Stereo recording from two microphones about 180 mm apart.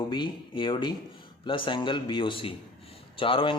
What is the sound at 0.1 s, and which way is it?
Speech, 25° left (ahead or behind).